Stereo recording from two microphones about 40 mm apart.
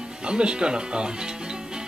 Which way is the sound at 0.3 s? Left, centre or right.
Right.